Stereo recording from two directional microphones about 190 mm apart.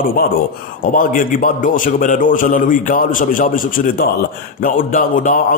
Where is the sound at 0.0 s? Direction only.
50° left (ahead or behind).